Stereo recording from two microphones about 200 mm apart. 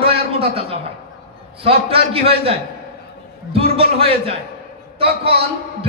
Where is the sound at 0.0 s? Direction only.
30° right (ahead or behind).